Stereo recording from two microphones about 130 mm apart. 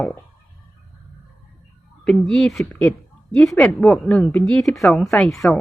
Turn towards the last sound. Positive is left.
turn(degrees=0)  # may be behind; listen again after turning